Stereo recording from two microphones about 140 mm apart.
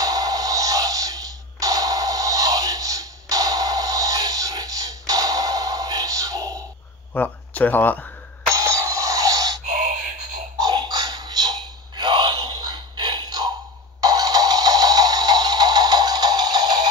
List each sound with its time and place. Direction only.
0.0 s music: 25° right (ahead or behind)
7.2 s speech: 10° left (ahead or behind)
8.5 s music: 20° right (ahead or behind)
9.7 s a sound: 70° right (ahead or behind)
10.6 s a sound: 30° right (ahead or behind)
14.0 s music: 25° right (ahead or behind)